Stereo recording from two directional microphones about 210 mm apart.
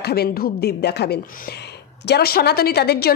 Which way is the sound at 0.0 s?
50° left (ahead or behind).